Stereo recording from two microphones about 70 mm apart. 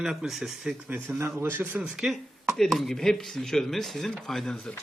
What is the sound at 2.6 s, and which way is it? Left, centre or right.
A man's voice, centre.